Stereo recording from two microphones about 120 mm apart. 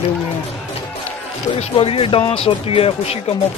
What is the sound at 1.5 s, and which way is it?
Speech, 60° left (ahead or behind).